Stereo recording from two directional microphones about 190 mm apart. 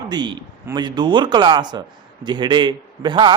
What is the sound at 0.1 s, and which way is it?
A man's voice, 20° right (ahead or behind).